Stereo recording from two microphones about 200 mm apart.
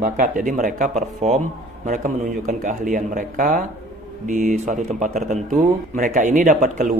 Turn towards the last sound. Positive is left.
turn(degrees=-40)  # may be behind; listen again after turning